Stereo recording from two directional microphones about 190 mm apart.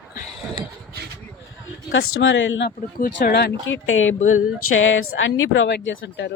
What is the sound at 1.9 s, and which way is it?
Speech, 80° left.